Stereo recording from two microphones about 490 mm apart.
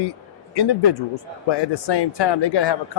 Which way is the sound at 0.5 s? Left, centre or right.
Left.